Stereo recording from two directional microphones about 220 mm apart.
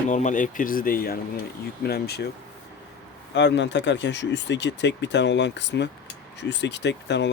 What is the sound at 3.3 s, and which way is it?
Speech, 55° left (ahead or behind).